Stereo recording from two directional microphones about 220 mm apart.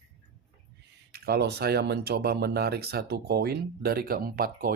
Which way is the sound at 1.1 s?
45° right (ahead or behind).